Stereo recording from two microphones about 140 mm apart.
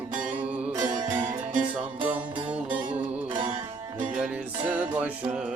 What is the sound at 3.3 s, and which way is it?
Music, 35° right (ahead or behind).